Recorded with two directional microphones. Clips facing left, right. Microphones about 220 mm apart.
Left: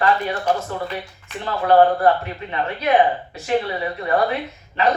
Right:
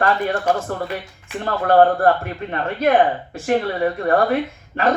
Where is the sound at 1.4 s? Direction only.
50° right (ahead or behind).